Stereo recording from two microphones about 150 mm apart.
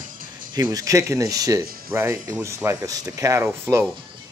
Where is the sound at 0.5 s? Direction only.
25° right (ahead or behind).